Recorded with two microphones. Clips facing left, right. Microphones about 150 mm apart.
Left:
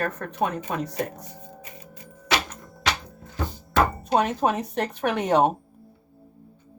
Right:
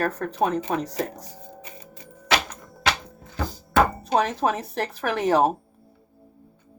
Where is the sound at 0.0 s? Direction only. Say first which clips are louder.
Right 3 dB; 35° right (ahead or behind).